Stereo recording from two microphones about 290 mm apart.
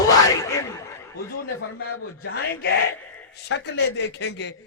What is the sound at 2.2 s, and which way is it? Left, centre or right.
A man's voice, left.